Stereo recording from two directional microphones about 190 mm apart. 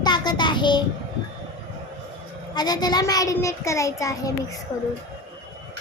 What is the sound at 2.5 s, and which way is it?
A child's voice, 20° left (ahead or behind).